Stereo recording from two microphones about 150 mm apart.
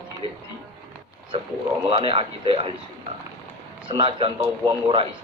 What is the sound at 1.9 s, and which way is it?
Speech, 35° right (ahead or behind).